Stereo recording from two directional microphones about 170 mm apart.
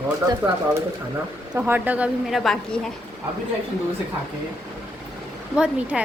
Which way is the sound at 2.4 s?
Centre (ahead or behind).